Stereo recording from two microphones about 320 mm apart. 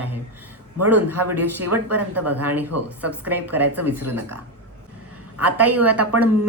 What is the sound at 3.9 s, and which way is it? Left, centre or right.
Speech, right.